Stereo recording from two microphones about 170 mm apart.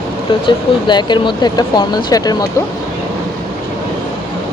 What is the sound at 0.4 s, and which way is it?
Speech, 25° left (ahead or behind).